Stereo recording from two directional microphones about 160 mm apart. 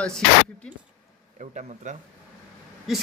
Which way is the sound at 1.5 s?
50° right (ahead or behind).